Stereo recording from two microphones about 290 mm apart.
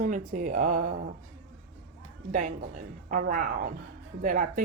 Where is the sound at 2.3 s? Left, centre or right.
Right.